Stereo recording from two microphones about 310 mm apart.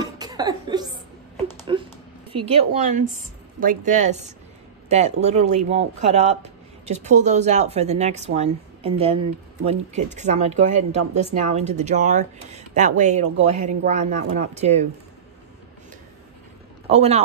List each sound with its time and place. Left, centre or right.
0.0 s cough: centre
1.6 s a sound: centre
2.3 s speech: centre
16.9 s speech: right